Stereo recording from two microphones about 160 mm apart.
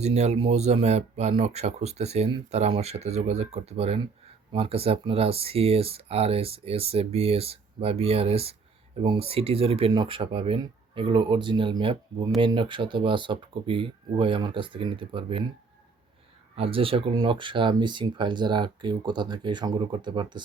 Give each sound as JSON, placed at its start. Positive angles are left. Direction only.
{"t": 0.0, "sound": "speech", "side_deg": -45}
{"t": 16.6, "sound": "speech", "side_deg": -35}